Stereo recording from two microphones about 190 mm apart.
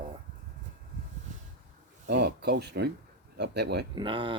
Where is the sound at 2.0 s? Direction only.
65° right (ahead or behind).